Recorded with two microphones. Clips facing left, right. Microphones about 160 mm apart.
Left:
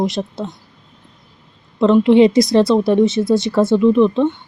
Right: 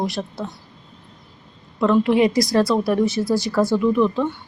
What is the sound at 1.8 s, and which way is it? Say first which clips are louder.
Speech: left 6 dB; 20° left (ahead or behind).